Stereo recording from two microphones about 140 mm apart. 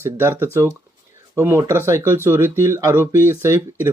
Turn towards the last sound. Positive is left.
turn(degrees=-20)  # may be behind; listen again after turning